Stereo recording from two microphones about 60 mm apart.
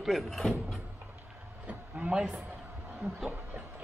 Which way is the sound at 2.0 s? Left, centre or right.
Centre.